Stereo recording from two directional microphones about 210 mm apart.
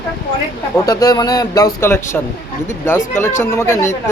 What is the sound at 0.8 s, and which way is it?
Speech, 20° left (ahead or behind).